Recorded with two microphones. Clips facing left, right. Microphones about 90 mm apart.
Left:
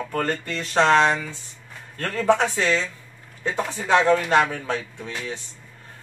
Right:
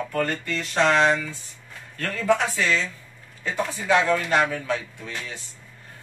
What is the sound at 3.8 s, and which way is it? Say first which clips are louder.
Speech: left 3 dB; 35° left (ahead or behind).